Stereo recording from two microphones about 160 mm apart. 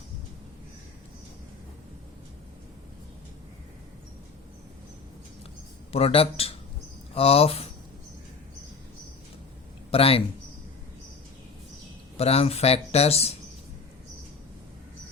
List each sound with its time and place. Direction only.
5.9 s speech: 35° left (ahead or behind)
9.9 s speech: 35° left (ahead or behind)
12.1 s speech: 40° left (ahead or behind)